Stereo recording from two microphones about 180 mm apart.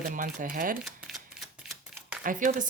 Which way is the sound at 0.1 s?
50° right (ahead or behind).